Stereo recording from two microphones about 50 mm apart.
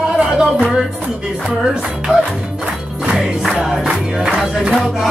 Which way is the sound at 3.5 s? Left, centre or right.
Centre.